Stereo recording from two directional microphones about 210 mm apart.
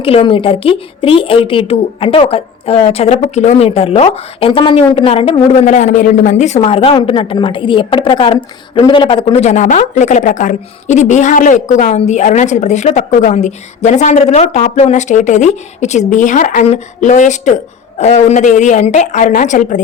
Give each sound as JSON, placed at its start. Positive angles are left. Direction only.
{"t": 0.0, "sound": "a woman's voice", "side_deg": 25}